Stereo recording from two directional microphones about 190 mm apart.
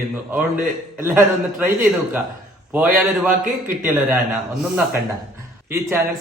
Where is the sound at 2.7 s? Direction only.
5° right (ahead or behind).